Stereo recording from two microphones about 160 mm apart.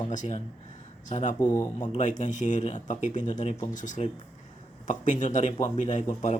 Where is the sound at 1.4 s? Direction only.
25° left (ahead or behind).